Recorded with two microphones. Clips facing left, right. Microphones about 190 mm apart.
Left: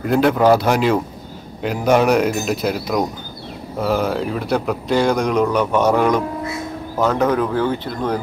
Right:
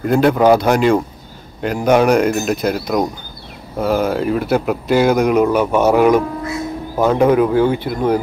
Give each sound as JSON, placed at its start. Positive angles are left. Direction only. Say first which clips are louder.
{"t": 0.0, "sound": "speech", "louder": "right 2 dB", "side_deg": 0}